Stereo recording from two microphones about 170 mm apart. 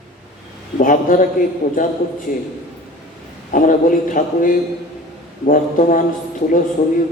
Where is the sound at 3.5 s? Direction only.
50° left (ahead or behind).